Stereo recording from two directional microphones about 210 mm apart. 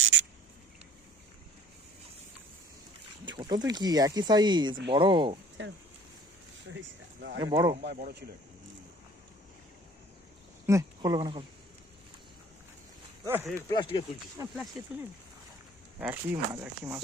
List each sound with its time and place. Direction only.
3.2 s speech: 20° right (ahead or behind)
6.7 s speech: 55° right (ahead or behind)
7.4 s speech: 20° right (ahead or behind)
7.8 s speech: 50° right (ahead or behind)
10.7 s speech: 15° right (ahead or behind)
13.2 s speech: 10° right (ahead or behind)
13.7 s speech: 20° left (ahead or behind)
16.0 s speech: 10° right (ahead or behind)